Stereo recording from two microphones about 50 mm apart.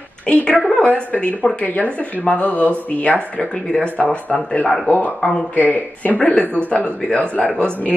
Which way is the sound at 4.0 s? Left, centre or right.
Left.